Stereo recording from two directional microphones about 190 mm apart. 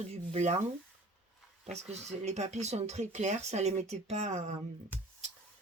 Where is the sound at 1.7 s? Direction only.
35° right (ahead or behind).